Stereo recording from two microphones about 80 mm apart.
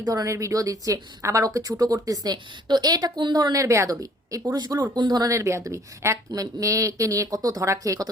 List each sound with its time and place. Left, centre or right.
0.0 s a woman's voice: right
5.3 s a woman's voice: right